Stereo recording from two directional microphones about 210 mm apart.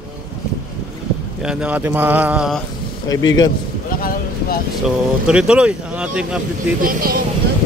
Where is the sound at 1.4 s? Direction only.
5° right (ahead or behind).